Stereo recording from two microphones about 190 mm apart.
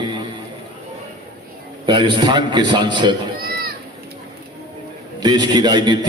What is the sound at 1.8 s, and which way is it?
A man's voice, 25° right (ahead or behind).